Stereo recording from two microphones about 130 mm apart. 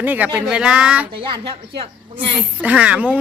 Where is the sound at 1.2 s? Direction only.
40° right (ahead or behind).